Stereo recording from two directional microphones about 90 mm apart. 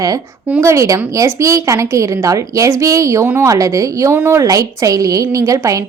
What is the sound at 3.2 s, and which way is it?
Speech, 25° right (ahead or behind).